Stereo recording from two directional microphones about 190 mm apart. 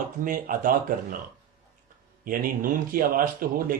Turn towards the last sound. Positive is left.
turn(degrees=-50)  # may be behind; listen again after turning